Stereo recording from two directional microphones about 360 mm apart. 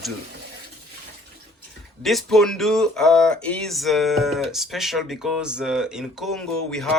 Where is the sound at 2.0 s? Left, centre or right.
Centre.